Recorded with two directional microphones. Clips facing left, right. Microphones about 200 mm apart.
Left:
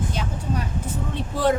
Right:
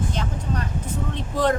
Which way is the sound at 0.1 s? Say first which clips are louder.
Even; 10° left (ahead or behind).